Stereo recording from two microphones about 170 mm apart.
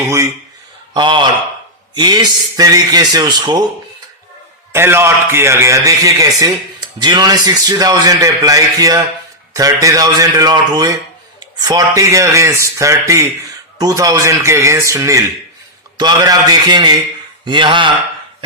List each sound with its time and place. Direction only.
0.9 s a man's voice: 25° right (ahead or behind)
4.7 s a man's voice: 15° right (ahead or behind)